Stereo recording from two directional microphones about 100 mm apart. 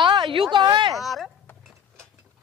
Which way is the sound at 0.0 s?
55° right (ahead or behind).